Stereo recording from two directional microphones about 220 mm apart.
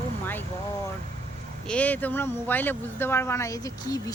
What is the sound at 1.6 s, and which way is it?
Speech, 5° left (ahead or behind).